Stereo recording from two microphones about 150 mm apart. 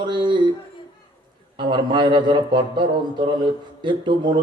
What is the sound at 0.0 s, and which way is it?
Speech, 30° right (ahead or behind).